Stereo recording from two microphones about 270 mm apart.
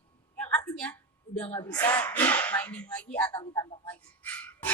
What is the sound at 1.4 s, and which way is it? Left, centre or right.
Speech, centre.